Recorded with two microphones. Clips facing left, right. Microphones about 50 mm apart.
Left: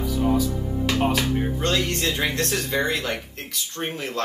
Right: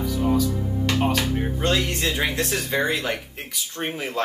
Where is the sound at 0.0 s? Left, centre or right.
Centre.